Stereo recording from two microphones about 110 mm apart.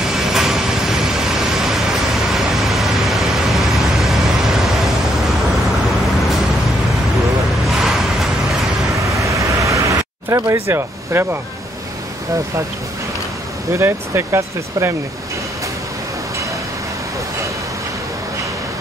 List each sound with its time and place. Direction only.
0.0 s vehicle: 5° right (ahead or behind)
7.6 s vehicle: centre (ahead or behind)
9.0 s a sound: 30° right (ahead or behind)
13.7 s speech: 25° right (ahead or behind)